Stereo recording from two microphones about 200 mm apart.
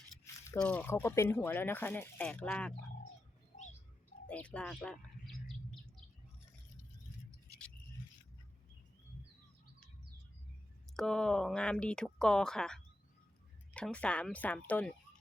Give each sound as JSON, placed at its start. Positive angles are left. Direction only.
{"t": 0.4, "sound": "speech", "side_deg": 10}
{"t": 4.3, "sound": "bird", "side_deg": 5}
{"t": 10.9, "sound": "speech", "side_deg": 5}